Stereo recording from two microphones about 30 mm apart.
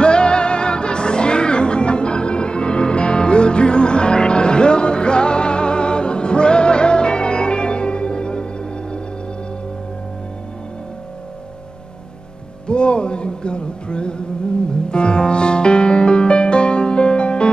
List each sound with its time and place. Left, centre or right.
0.0 s music: left
12.6 s music: left